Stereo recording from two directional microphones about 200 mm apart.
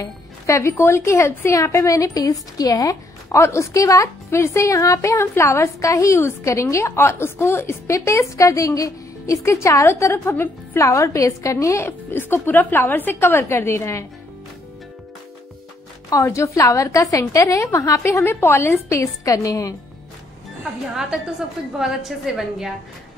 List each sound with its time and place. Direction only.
0.0 s speech: 15° left (ahead or behind)
16.1 s speech: 15° left (ahead or behind)
21.7 s a woman's voice: centre (ahead or behind)